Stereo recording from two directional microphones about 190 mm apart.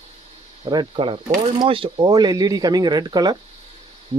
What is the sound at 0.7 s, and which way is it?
Speech, 25° right (ahead or behind).